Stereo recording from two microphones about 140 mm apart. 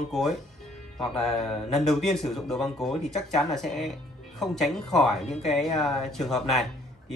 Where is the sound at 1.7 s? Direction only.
Centre (ahead or behind).